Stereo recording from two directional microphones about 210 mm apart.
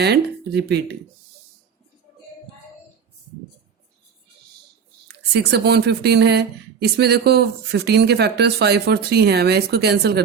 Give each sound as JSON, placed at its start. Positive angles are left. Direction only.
{"t": 0.0, "sound": "speech", "side_deg": -50}
{"t": 5.0, "sound": "speech", "side_deg": -55}